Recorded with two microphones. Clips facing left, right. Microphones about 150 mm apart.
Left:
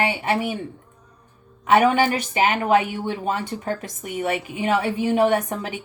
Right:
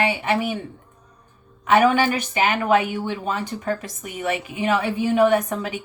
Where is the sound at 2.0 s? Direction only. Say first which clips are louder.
Left 1 dB; 30° left (ahead or behind).